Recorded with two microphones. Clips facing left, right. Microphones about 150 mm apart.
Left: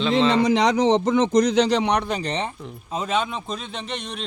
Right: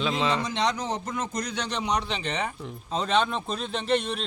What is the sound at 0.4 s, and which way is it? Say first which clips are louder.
A man's voice: left 10 dB; 90° left.